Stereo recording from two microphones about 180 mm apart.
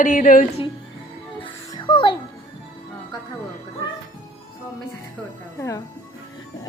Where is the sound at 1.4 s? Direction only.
30° left (ahead or behind).